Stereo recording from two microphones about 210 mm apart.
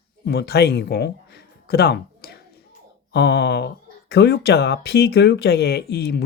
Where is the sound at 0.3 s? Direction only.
50° left (ahead or behind).